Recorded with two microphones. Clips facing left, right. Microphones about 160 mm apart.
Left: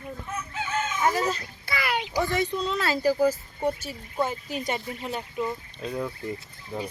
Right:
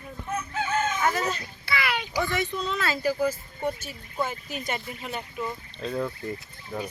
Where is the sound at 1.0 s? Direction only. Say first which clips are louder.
Left 2 dB; 30° left (ahead or behind).